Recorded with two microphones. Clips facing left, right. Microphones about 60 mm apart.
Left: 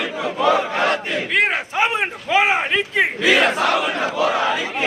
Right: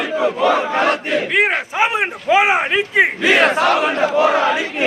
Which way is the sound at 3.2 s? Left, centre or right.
Right.